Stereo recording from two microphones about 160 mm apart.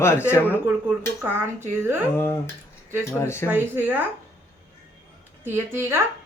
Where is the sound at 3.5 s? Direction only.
10° right (ahead or behind).